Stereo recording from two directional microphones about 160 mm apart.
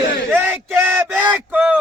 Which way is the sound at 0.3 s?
10° right (ahead or behind).